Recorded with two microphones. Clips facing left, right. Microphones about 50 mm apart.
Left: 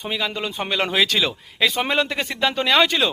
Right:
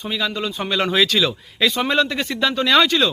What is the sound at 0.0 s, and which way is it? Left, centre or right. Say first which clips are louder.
A man's voice: right 2 dB; centre.